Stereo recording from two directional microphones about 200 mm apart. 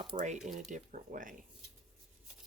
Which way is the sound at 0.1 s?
25° right (ahead or behind).